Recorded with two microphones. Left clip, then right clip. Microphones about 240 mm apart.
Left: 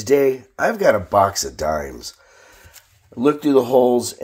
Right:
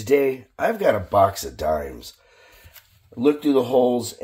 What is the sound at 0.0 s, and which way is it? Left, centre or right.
Speech, left.